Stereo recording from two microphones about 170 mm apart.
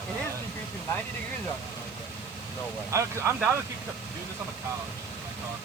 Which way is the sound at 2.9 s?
15° right (ahead or behind).